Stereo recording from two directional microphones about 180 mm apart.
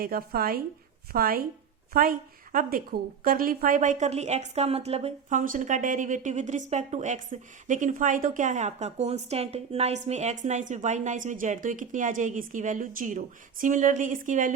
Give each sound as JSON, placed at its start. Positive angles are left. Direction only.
{"t": 0.0, "sound": "a woman's voice", "side_deg": -55}